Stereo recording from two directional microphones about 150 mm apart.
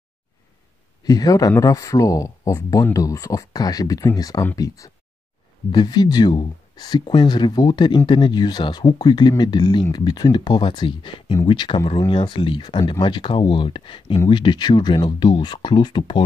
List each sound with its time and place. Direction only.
1.0 s speech: 25° left (ahead or behind)